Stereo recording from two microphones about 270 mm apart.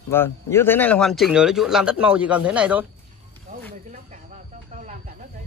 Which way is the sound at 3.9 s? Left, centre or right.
Right.